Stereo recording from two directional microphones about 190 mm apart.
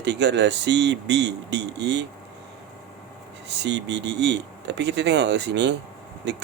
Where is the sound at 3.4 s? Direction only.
65° right (ahead or behind).